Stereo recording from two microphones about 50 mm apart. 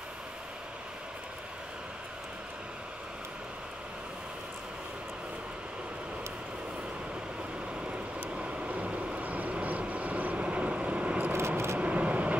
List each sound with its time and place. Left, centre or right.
8.2 s vehicle: right
11.3 s vehicle: right
11.8 s vehicle: right